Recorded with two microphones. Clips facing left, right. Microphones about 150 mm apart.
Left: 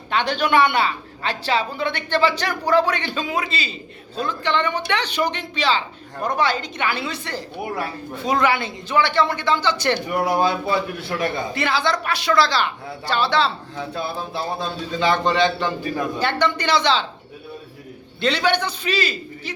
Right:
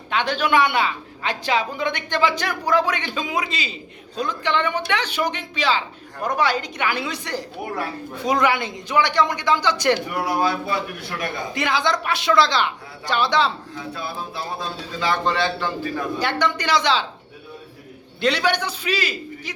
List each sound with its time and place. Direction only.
0.1 s a woman's voice: 5° right (ahead or behind)
10.1 s a man's voice: 25° left (ahead or behind)
11.5 s a woman's voice: 15° right (ahead or behind)
14.9 s a man's voice: 20° left (ahead or behind)
16.1 s a woman's voice: 10° right (ahead or behind)
18.2 s a woman's voice: 10° right (ahead or behind)